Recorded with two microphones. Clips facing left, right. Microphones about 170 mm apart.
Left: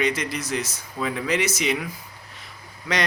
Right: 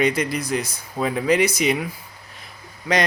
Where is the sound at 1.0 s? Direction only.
40° right (ahead or behind).